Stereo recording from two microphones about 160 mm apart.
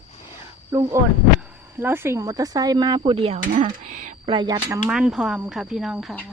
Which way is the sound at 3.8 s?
50° right (ahead or behind).